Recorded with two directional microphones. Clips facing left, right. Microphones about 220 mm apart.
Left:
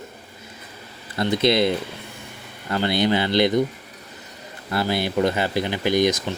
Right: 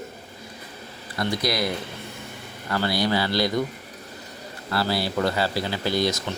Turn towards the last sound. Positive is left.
turn(degrees=15)  # may be behind; listen again after turning